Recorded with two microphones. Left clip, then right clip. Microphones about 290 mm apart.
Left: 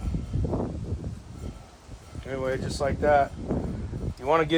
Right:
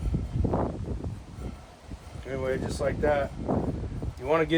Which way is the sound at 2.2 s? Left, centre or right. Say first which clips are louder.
Left 1 dB; centre.